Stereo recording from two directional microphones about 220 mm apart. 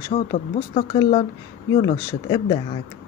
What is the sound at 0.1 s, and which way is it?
Speech, 30° left (ahead or behind).